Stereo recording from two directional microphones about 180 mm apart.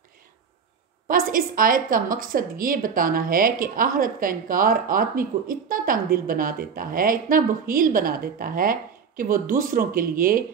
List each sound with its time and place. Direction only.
1.0 s a woman's voice: 50° right (ahead or behind)